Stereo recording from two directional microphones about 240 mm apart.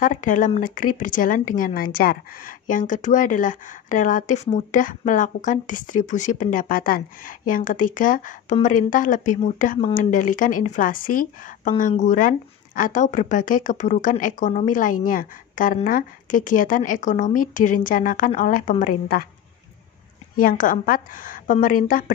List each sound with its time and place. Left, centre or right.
0.0 s a woman's voice: left
20.3 s a woman's voice: left